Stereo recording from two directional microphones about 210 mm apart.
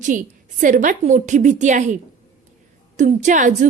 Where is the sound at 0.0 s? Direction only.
40° right (ahead or behind).